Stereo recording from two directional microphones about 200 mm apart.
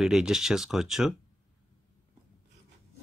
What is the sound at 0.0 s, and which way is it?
Speech, 5° right (ahead or behind).